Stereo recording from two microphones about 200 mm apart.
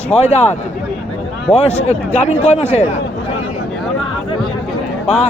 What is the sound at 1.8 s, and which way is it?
Speech, 35° left (ahead or behind).